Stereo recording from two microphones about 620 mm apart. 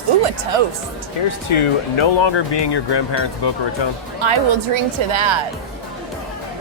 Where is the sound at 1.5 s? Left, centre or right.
Left.